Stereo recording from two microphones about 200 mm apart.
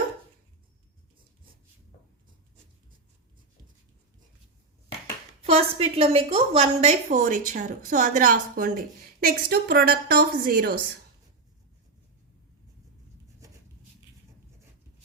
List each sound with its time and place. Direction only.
5.4 s a woman's voice: 30° right (ahead or behind); by 10.8 s 45° right (ahead or behind)